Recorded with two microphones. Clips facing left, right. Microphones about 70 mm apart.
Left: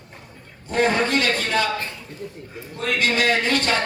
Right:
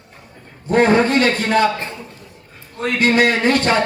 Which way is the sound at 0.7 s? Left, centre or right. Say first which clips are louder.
Right 6 dB; right.